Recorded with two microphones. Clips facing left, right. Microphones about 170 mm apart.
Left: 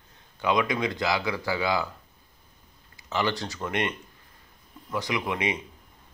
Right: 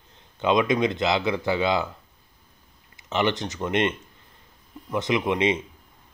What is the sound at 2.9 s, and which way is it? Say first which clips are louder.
Speech: right 4 dB; 20° right (ahead or behind).